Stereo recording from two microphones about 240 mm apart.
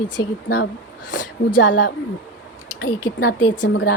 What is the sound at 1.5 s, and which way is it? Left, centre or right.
Speech, left.